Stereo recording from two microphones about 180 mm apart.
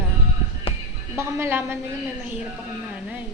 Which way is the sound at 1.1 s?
15° right (ahead or behind).